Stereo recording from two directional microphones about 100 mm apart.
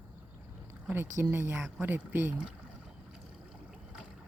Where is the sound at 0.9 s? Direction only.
20° right (ahead or behind).